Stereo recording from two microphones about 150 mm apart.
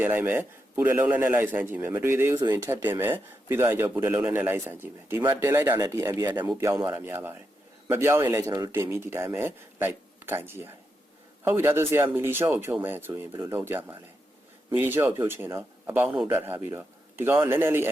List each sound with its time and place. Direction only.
0.0 s speech: 15° right (ahead or behind)
2.8 s speech: 15° right (ahead or behind)